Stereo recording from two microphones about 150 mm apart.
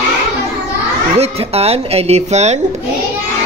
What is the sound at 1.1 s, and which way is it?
Speech, 45° right (ahead or behind).